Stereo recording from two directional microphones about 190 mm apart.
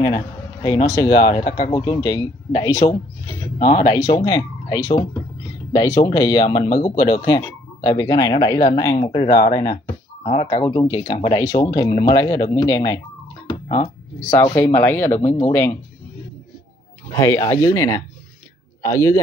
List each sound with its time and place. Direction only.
0.0 s a sound: 20° left (ahead or behind)
0.8 s speech: 20° left (ahead or behind)
6.8 s speech: 40° left (ahead or behind)
7.2 s speech: 20° left (ahead or behind)
10.2 s speech: 30° left (ahead or behind); by 13.0 s 15° left (ahead or behind)
14.3 s speech: 15° left (ahead or behind)
17.1 s speech: 15° left (ahead or behind)